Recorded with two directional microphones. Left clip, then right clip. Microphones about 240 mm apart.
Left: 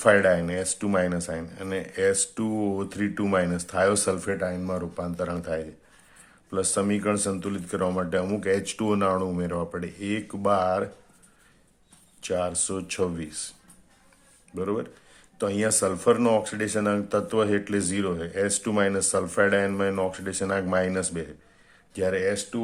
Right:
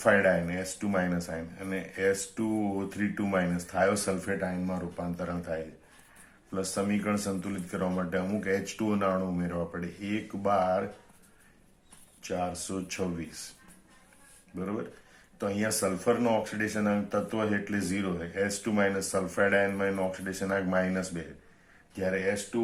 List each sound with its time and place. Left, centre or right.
0.0 s speech: left
12.2 s speech: left
14.5 s speech: left